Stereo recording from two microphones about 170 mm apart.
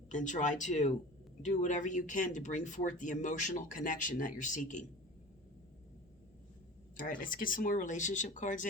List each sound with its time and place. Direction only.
0.1 s speech: 45° left (ahead or behind)
6.9 s speech: 50° left (ahead or behind)